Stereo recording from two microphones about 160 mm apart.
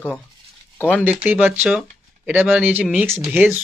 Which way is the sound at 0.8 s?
5° left (ahead or behind).